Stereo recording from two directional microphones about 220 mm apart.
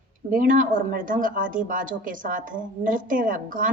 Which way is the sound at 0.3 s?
40° right (ahead or behind).